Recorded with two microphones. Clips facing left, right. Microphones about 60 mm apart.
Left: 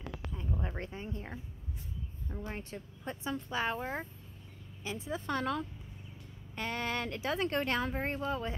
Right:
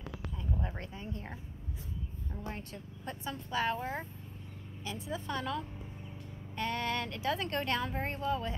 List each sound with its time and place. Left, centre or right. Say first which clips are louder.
0.4 s a sound: even; left
2.4 s speech: left 1 dB; left
5.2 s a woman's voice: left 3 dB; left
6.6 s speech: right 1 dB; left